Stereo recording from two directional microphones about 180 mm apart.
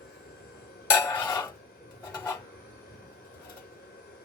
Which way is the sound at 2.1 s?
20° left (ahead or behind).